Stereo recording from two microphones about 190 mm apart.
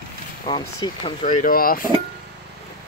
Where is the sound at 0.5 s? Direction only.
20° left (ahead or behind).